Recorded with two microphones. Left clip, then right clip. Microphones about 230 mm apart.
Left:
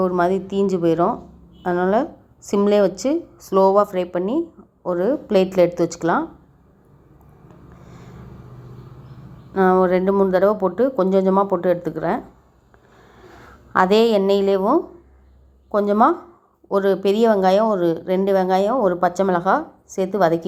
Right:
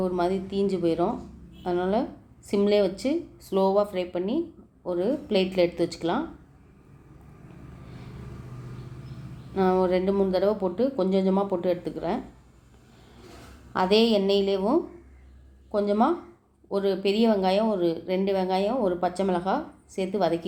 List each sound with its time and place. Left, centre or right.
0.0 s speech: left
9.6 s speech: left
13.7 s speech: left